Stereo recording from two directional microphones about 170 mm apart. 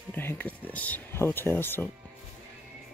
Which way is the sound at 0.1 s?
10° left (ahead or behind).